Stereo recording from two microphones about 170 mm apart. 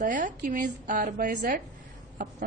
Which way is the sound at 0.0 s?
50° right (ahead or behind).